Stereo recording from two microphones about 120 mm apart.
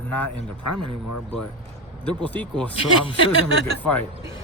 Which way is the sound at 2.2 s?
15° left (ahead or behind).